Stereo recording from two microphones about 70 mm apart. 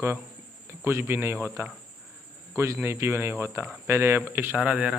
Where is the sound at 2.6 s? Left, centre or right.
Right.